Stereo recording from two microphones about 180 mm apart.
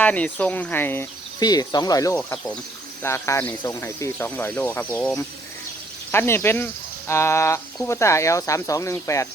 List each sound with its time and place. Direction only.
0.0 s speech: 10° left (ahead or behind)